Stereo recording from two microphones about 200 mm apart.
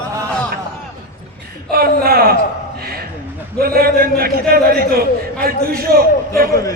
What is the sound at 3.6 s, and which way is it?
A man's voice, 50° right (ahead or behind).